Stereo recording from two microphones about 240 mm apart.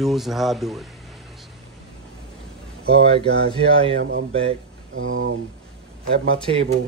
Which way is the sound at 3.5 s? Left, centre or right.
Right.